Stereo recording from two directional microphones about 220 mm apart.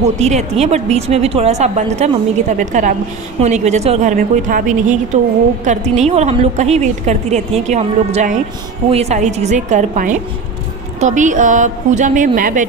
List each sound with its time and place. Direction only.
0.0 s a woman's voice: 30° right (ahead or behind)